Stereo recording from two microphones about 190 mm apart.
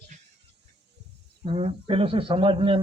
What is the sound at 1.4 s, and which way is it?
A man's voice, 30° right (ahead or behind).